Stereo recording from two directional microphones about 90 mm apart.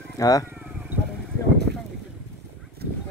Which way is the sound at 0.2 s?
40° left (ahead or behind).